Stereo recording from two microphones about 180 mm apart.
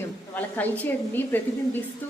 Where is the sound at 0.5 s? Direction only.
10° left (ahead or behind).